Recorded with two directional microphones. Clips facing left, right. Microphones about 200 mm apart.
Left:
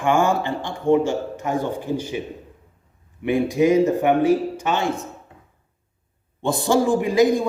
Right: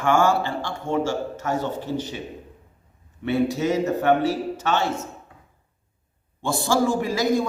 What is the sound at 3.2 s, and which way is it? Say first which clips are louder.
A man's voice: left 4 dB; 15° left (ahead or behind).